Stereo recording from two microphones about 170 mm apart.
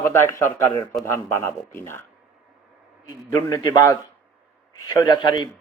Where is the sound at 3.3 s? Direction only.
15° left (ahead or behind).